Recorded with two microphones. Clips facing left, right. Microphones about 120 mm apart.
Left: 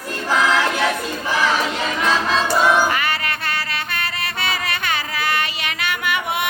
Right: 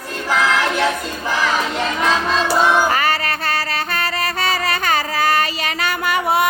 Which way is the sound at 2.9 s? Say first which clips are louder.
Right 4 dB; 40° right (ahead or behind).